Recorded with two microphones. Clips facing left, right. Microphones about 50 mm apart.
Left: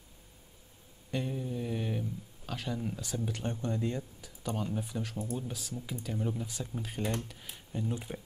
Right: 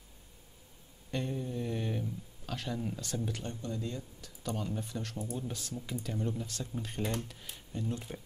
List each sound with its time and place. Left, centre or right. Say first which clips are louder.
1.1 s a sound: left 1 dB; centre
3.4 s speech: left 5 dB; left
4.2 s speech: left 2 dB; centre